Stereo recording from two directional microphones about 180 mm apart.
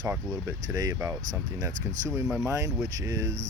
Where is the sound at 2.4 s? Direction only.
15° right (ahead or behind).